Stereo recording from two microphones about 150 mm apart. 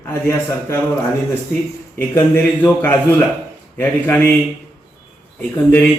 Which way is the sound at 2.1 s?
15° left (ahead or behind).